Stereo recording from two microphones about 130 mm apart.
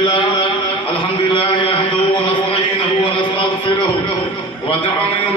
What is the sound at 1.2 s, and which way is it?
Mantra, 40° left (ahead or behind).